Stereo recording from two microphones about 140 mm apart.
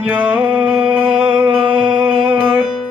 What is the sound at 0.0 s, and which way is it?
Music, 10° right (ahead or behind).